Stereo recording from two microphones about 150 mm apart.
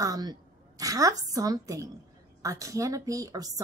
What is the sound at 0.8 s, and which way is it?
A woman's voice, 25° right (ahead or behind).